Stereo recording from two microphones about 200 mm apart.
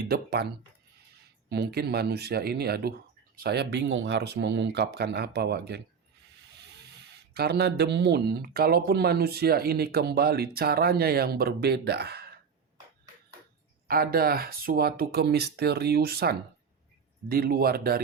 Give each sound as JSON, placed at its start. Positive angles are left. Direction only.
{"t": 0.0, "sound": "speech", "side_deg": -50}
{"t": 1.5, "sound": "speech", "side_deg": -50}
{"t": 7.3, "sound": "speech", "side_deg": -55}
{"t": 13.8, "sound": "speech", "side_deg": -45}